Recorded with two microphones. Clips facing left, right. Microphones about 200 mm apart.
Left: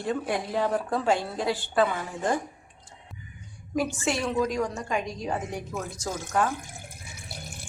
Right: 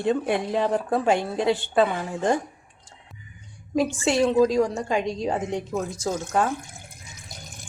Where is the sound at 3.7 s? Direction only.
30° right (ahead or behind).